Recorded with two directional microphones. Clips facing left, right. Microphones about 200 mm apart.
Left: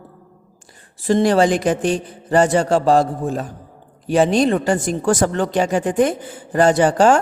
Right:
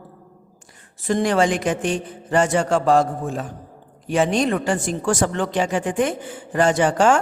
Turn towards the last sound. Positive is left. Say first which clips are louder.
# left 3 dB
turn(degrees=35)  # may be behind; listen again after turning